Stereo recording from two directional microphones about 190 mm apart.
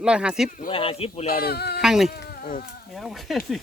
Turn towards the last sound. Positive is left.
turn(degrees=0)  # may be behind; listen again after turning